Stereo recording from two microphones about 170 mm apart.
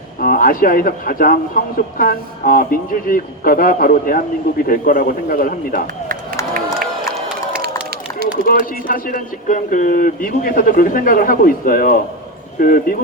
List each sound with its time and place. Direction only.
0.2 s speech: 60° left (ahead or behind)
8.4 s speech: 55° left (ahead or behind)